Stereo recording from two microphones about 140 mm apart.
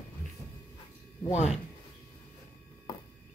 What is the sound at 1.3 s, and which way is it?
Speech, 50° left (ahead or behind).